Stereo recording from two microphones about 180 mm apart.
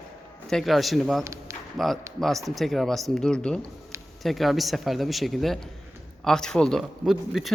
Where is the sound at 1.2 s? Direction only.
15° right (ahead or behind).